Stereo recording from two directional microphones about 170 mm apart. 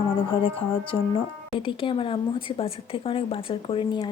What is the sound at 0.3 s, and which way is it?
A woman's voice, 30° left (ahead or behind).